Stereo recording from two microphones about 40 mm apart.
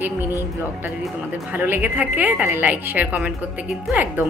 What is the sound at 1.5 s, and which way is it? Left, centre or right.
A woman's voice, right.